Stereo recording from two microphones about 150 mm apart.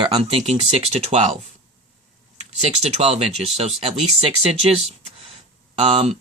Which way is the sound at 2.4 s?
45° right (ahead or behind).